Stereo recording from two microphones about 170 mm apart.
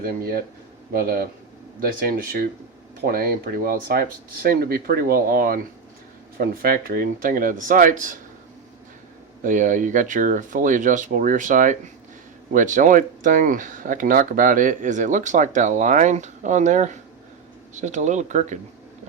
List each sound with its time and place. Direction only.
0.0 s speech: 60° right (ahead or behind)
9.4 s speech: 50° right (ahead or behind)